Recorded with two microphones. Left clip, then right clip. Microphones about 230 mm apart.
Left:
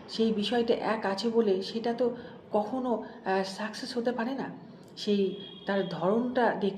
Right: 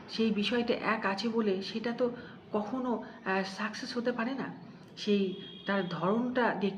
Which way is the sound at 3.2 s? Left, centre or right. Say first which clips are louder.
Left 2 dB; right.